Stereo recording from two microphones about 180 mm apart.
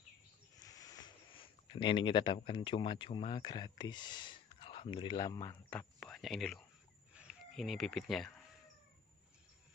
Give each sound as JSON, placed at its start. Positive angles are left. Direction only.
{"t": 0.7, "sound": "speech", "side_deg": 20}
{"t": 5.7, "sound": "speech", "side_deg": 10}
{"t": 7.2, "sound": "a sound", "side_deg": -5}
{"t": 7.5, "sound": "speech", "side_deg": 0}